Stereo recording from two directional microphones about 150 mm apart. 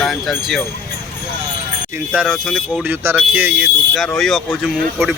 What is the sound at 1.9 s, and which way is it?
Speech, 10° right (ahead or behind).